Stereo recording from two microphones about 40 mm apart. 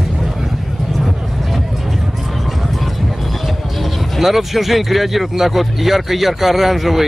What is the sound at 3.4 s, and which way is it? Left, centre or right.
Speech, centre.